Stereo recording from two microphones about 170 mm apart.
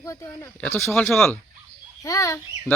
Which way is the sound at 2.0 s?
20° left (ahead or behind).